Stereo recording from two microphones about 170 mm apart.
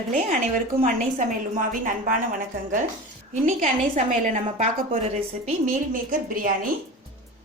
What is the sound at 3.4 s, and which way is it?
A woman's voice, 45° right (ahead or behind).